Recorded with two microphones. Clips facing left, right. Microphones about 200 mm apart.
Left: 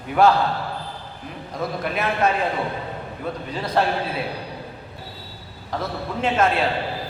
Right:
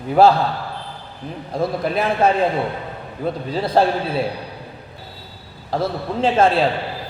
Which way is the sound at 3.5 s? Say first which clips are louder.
Right 5 dB; 35° right (ahead or behind).